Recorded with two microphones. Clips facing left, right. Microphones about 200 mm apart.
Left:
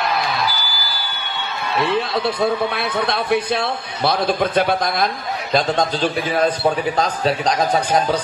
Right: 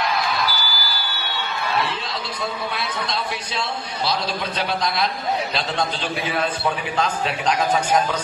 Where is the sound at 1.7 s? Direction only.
55° left (ahead or behind).